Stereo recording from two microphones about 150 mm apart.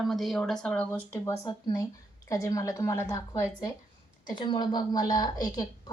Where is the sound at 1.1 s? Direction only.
20° left (ahead or behind).